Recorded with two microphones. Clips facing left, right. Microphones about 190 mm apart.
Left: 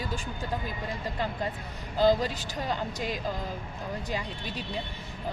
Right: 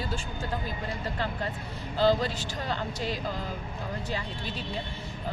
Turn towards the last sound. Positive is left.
turn(degrees=10)  # may be behind; listen again after turning